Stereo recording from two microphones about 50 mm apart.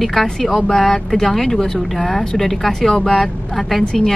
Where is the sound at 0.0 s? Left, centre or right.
Centre.